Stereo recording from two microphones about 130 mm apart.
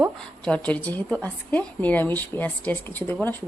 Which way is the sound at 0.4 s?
10° left (ahead or behind).